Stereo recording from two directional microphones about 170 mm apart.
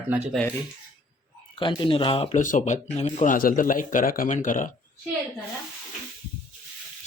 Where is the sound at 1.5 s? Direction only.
30° left (ahead or behind).